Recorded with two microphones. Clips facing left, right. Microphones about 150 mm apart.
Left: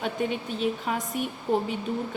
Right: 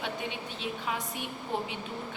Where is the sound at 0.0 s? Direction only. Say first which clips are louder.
Left 7 dB; 45° left (ahead or behind).